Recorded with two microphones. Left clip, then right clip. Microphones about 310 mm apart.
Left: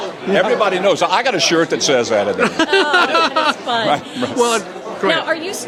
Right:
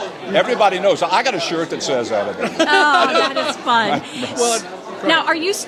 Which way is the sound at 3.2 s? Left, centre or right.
Left.